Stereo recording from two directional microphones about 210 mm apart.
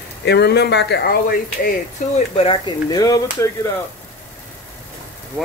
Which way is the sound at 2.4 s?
25° left (ahead or behind).